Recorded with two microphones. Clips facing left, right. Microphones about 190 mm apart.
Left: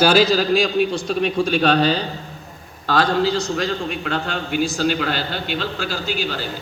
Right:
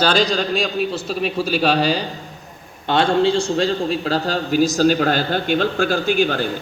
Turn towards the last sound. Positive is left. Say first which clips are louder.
# right 7 dB
turn(degrees=-50)  # may be behind; listen again after turning